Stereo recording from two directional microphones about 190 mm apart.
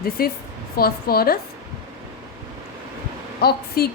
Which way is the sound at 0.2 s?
50° left (ahead or behind).